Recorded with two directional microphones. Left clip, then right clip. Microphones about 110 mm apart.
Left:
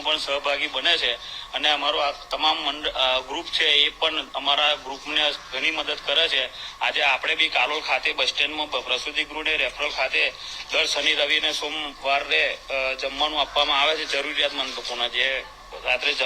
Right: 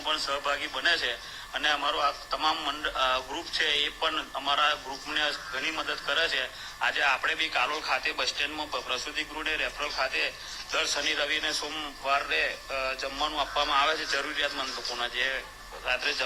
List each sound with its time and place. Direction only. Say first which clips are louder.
0.0 s a man's voice: left 5 dB; 15° left (ahead or behind)